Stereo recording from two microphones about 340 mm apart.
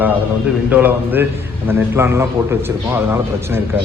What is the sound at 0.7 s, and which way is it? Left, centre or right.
A man's voice, centre.